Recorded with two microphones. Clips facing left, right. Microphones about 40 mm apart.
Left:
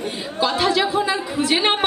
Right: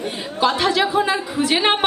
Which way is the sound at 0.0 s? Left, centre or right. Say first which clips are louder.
Right 2 dB; right.